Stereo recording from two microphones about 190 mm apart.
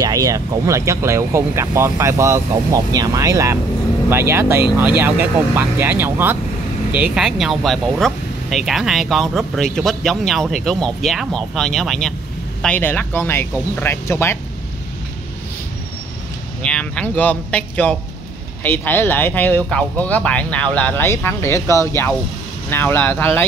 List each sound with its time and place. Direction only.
0.0 s speech: 20° right (ahead or behind); by 14.4 s 15° left (ahead or behind)
16.6 s speech: 5° left (ahead or behind)